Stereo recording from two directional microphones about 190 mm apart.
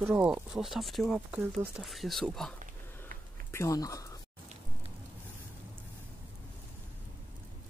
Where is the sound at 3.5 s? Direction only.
15° left (ahead or behind).